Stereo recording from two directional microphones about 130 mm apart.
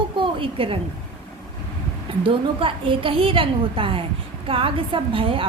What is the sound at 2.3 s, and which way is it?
A woman's voice, 45° right (ahead or behind).